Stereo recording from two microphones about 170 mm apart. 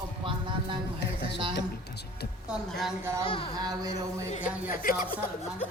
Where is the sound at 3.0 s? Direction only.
15° right (ahead or behind).